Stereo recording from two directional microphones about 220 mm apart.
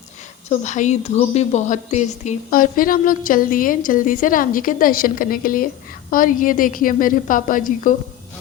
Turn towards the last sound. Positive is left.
turn(degrees=40)  # may be behind; listen again after turning